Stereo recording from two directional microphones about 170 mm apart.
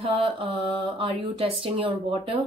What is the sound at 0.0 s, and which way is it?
Mantra, 30° right (ahead or behind).